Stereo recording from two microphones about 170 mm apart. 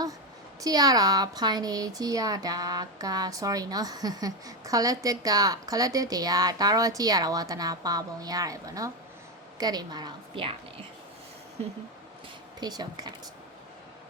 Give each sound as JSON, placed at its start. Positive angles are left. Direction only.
{"t": 0.6, "sound": "speech", "side_deg": -20}
{"t": 12.5, "sound": "speech", "side_deg": -25}